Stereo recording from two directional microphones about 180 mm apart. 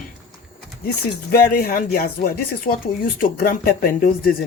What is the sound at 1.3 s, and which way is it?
Speech, 55° left (ahead or behind).